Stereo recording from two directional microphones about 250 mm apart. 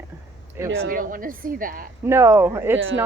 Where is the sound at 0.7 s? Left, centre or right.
Right.